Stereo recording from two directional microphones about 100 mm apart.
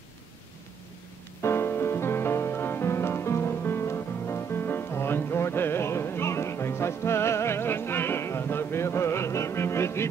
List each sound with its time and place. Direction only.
1.4 s music: 25° left (ahead or behind)